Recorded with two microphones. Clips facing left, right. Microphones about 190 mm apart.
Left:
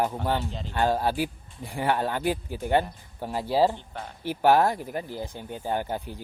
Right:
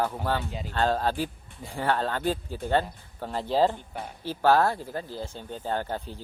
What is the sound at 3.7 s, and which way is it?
Speech, 10° right (ahead or behind).